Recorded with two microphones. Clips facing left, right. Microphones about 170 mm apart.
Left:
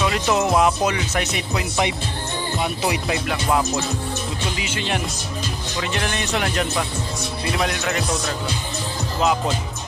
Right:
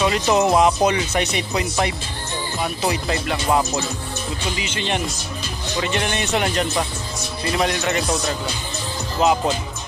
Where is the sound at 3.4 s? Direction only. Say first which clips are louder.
Right 1 dB; 5° right (ahead or behind).